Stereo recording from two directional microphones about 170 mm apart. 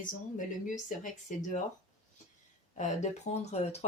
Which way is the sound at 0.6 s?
50° left (ahead or behind).